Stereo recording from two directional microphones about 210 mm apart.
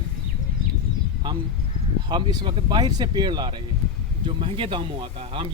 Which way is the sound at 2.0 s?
20° right (ahead or behind).